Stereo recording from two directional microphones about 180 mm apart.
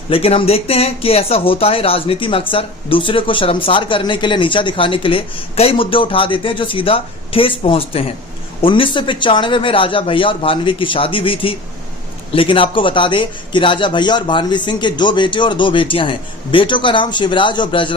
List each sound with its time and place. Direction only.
0.1 s speech: 30° left (ahead or behind)